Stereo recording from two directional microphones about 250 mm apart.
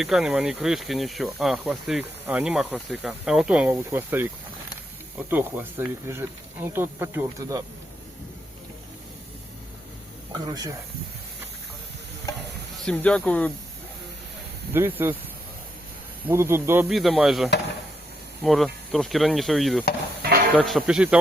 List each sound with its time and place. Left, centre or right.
0.0 s speech: centre
12.8 s speech: centre
14.7 s speech: centre
16.2 s speech: centre